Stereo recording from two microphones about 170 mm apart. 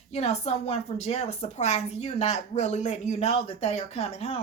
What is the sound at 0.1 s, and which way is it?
A woman's voice, 40° left (ahead or behind).